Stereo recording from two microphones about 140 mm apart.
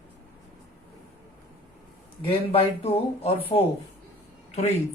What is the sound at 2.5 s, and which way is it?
Speech, 45° left (ahead or behind).